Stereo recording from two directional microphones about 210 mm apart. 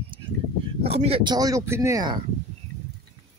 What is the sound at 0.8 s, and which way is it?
Speech, 30° right (ahead or behind).